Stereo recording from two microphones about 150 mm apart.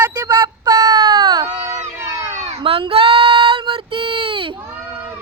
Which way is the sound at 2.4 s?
35° right (ahead or behind).